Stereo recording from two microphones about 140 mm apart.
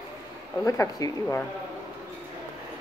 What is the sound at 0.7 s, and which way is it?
Speech, 25° left (ahead or behind).